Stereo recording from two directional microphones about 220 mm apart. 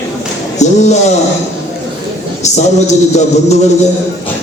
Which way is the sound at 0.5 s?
30° left (ahead or behind).